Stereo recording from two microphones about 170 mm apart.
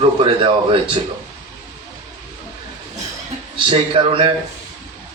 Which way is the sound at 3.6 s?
30° right (ahead or behind).